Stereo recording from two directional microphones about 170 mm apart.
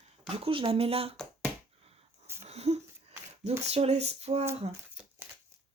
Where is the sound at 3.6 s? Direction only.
40° right (ahead or behind).